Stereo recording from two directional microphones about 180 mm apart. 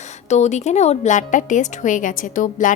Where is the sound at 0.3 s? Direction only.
40° left (ahead or behind).